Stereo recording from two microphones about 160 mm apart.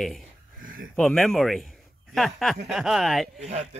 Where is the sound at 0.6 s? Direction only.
60° right (ahead or behind).